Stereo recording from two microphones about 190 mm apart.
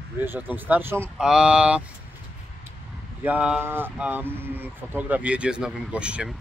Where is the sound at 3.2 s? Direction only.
5° right (ahead or behind).